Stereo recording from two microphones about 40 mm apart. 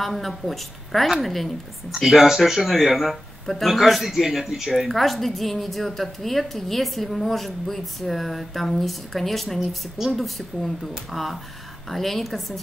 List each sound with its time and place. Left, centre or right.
0.0 s a woman's voice: centre